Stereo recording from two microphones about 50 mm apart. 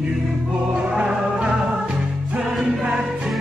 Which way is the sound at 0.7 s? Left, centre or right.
Centre.